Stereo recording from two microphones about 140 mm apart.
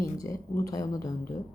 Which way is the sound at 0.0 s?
25° left (ahead or behind).